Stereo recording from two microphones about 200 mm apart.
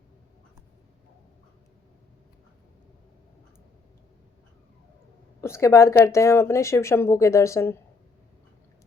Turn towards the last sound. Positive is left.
turn(degrees=15)  # may be behind; listen again after turning